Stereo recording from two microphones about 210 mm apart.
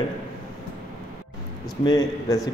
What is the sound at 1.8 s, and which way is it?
Speech, 20° left (ahead or behind).